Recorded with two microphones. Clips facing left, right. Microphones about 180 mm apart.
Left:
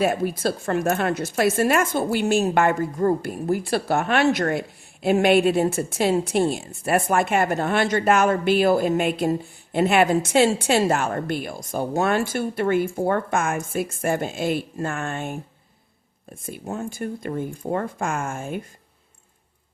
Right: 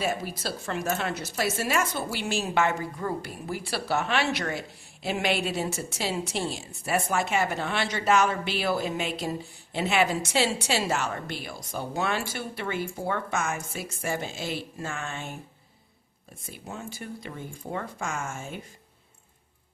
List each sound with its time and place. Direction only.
0.0 s speech: 55° left (ahead or behind)